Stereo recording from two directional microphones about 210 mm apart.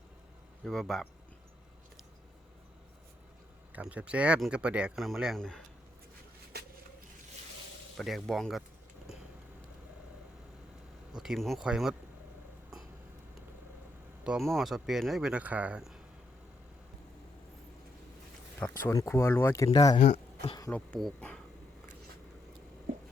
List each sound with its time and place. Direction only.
0.6 s speech: centre (ahead or behind)
3.7 s speech: 5° right (ahead or behind)
6.5 s a sound: 50° right (ahead or behind)
7.9 s speech: centre (ahead or behind)
11.2 s speech: centre (ahead or behind)
14.3 s speech: centre (ahead or behind)
18.9 s speech: 15° left (ahead or behind)
20.1 s speech: 30° left (ahead or behind)
20.6 s speech: 10° left (ahead or behind)